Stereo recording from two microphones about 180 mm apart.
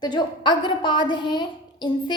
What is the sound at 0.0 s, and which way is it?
A woman's voice, 25° left (ahead or behind).